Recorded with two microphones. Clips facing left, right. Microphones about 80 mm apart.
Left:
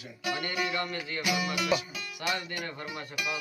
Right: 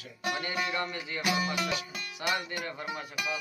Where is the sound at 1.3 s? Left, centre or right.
Right.